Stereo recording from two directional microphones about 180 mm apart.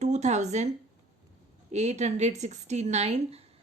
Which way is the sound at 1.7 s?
40° right (ahead or behind).